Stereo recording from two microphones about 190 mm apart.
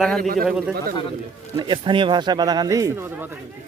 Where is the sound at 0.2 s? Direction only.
45° right (ahead or behind).